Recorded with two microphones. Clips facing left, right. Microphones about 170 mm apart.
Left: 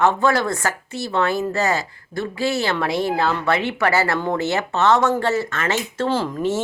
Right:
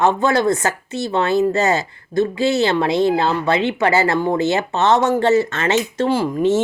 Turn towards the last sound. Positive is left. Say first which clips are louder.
# right 5 dB
turn(degrees=-15)  # may be behind; listen again after turning